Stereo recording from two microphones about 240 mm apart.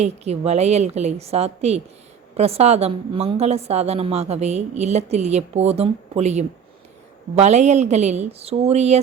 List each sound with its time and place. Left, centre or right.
0.0 s a woman's voice: right